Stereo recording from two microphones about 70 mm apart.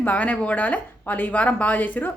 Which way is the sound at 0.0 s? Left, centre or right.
Left.